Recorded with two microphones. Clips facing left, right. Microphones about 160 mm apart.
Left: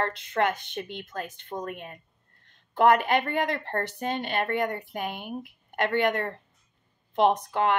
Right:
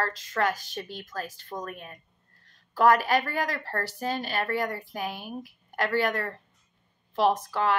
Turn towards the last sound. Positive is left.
turn(degrees=25)  # may be behind; listen again after turning